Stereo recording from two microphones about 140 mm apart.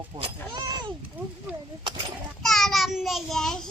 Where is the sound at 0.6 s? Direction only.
30° right (ahead or behind).